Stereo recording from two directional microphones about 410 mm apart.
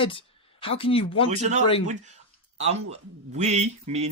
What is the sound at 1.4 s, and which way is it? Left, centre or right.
Speech, centre.